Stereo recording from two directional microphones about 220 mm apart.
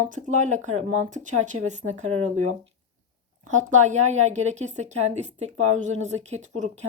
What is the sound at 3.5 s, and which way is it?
Speech, 35° right (ahead or behind).